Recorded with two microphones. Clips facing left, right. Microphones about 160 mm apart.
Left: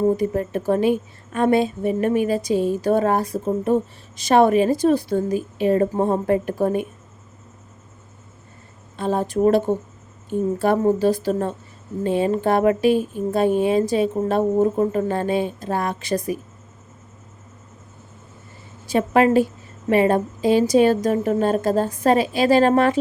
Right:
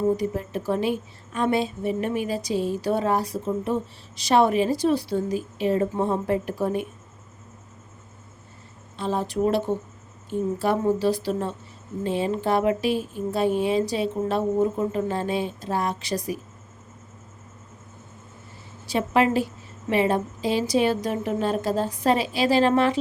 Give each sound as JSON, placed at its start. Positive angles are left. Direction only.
{"t": 0.2, "sound": "speech", "side_deg": 50}
{"t": 9.0, "sound": "speech", "side_deg": 50}
{"t": 18.9, "sound": "speech", "side_deg": 50}